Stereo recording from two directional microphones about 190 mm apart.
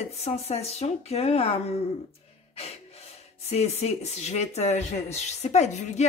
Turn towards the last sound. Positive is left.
turn(degrees=35)  # may be behind; listen again after turning